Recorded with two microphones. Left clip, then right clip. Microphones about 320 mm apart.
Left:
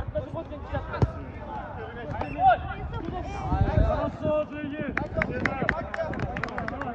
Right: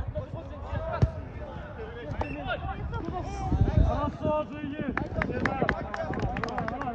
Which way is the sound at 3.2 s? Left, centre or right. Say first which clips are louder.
Left 3 dB; centre.